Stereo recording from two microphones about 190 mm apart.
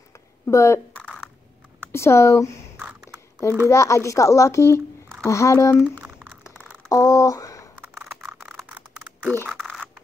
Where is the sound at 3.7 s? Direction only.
15° left (ahead or behind).